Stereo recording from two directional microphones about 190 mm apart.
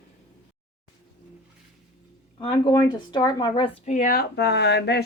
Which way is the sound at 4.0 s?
50° left (ahead or behind).